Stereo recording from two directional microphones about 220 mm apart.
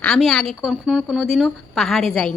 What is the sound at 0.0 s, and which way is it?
A woman's voice, 5° left (ahead or behind).